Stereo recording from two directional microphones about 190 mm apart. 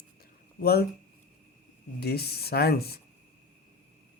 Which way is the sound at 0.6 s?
55° left (ahead or behind).